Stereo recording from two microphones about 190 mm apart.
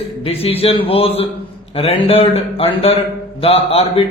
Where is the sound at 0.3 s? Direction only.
30° left (ahead or behind).